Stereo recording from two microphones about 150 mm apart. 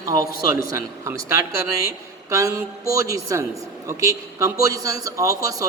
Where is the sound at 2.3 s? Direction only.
20° right (ahead or behind).